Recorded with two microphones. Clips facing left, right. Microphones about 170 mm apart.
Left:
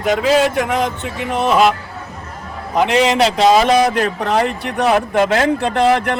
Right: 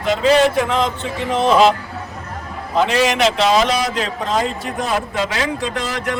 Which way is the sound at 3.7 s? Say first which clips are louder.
Left 6 dB; 55° left (ahead or behind).